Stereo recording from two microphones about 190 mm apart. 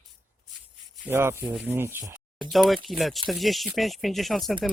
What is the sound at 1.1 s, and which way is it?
Speech, 15° right (ahead or behind).